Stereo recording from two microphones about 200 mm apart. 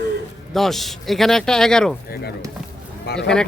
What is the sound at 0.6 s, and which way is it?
Speech, centre (ahead or behind).